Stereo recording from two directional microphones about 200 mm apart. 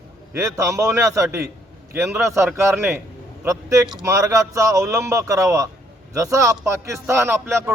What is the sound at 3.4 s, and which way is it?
A man's voice, 15° right (ahead or behind).